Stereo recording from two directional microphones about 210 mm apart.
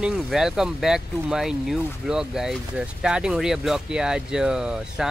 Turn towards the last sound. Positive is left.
turn(degrees=-5)  # may be behind; listen again after turning